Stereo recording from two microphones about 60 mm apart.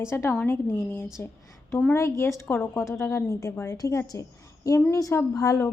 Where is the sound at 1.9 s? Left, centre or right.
Left.